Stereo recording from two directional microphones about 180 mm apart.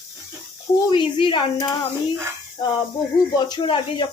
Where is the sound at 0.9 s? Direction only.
30° left (ahead or behind).